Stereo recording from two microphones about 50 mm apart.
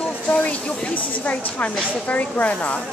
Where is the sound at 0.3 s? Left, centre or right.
Left.